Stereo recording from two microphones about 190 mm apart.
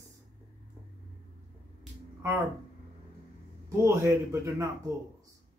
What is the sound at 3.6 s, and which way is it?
A man's voice, 15° right (ahead or behind).